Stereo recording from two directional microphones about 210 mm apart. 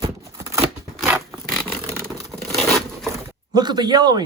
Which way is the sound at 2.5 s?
Centre (ahead or behind).